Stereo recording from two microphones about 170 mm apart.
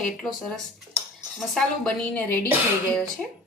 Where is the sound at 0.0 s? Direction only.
Centre (ahead or behind).